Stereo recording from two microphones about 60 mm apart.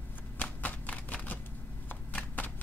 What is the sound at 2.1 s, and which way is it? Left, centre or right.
Shuffling cards, left.